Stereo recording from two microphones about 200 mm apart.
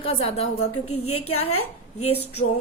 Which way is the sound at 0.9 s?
90° left.